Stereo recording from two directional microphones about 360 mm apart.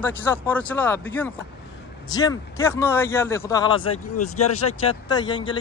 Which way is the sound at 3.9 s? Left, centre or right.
Left.